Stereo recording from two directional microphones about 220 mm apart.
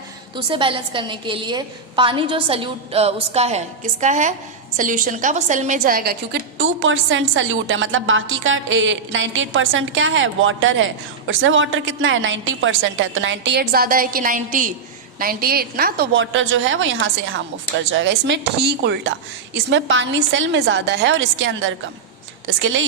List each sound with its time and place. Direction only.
0.3 s a woman's voice: 25° right (ahead or behind); by 6.1 s 40° right (ahead or behind)
6.6 s a woman's voice: 60° right (ahead or behind)